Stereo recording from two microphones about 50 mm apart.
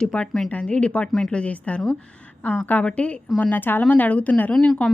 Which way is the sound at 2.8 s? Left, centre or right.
Left.